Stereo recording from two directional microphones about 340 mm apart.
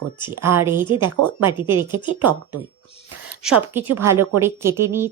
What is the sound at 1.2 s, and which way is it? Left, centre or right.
Speech, right.